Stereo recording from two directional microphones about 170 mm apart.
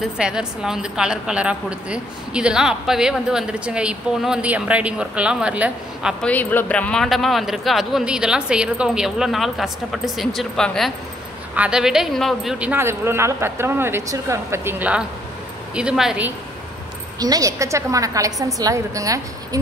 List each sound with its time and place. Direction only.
0.0 s a woman's voice: 5° right (ahead or behind)
6.2 s a woman's voice: 10° left (ahead or behind)
17.2 s a woman's voice: 20° right (ahead or behind)